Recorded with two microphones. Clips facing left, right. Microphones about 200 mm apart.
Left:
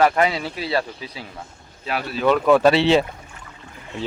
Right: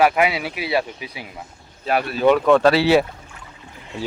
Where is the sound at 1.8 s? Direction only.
50° right (ahead or behind).